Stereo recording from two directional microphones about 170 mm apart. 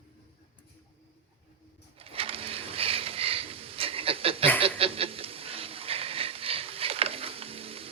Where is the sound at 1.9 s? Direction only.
35° right (ahead or behind).